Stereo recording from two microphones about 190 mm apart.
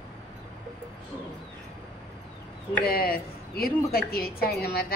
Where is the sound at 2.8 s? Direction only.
55° left (ahead or behind).